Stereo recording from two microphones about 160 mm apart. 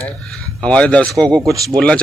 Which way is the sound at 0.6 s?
5° left (ahead or behind).